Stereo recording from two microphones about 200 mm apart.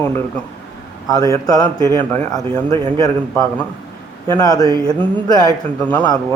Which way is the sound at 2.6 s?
25° right (ahead or behind).